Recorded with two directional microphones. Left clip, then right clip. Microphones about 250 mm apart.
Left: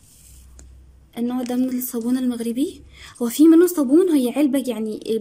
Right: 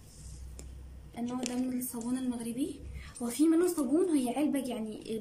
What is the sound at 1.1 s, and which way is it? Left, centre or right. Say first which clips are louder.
A woman's voice: left 12 dB; left.